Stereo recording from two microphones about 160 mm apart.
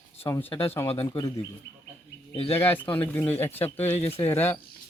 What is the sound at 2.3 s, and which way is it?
Speech, 35° left (ahead or behind).